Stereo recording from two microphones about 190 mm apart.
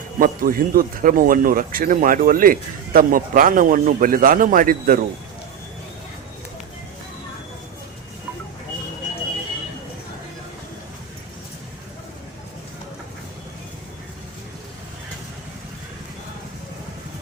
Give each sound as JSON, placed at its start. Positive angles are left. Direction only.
{"t": 0.2, "sound": "a man's voice", "side_deg": -50}